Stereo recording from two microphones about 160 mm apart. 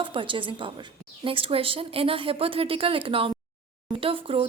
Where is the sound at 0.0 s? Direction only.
30° right (ahead or behind).